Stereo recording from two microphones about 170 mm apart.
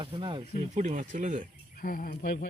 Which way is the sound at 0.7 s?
45° right (ahead or behind).